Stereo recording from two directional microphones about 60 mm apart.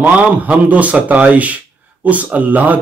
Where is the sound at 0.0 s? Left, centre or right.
Right.